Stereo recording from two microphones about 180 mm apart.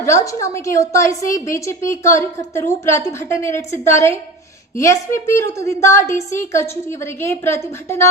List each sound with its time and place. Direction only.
0.0 s a woman's voice: 15° left (ahead or behind)